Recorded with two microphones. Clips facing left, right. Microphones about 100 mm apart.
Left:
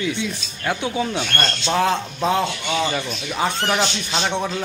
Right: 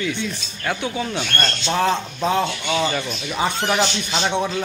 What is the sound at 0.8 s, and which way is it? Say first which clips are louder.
Speech: left 2 dB; 20° left (ahead or behind).